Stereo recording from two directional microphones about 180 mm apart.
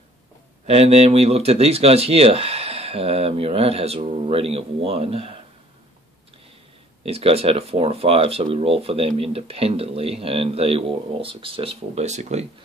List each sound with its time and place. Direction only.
0.7 s speech: 35° right (ahead or behind)
7.0 s speech: 35° right (ahead or behind)